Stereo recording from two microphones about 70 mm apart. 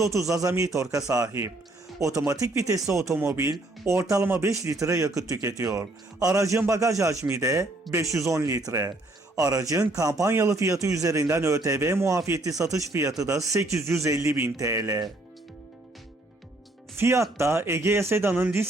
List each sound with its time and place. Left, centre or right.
0.0 s speech: right
8.1 s speech: right
11.8 s speech: right
13.6 s speech: right
17.0 s speech: right